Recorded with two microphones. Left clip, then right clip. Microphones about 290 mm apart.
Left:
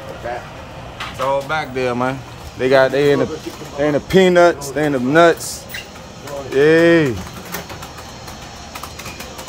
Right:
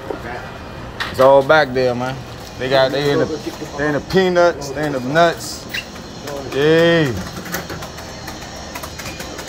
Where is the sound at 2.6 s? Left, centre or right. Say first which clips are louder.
Left 3 dB; left.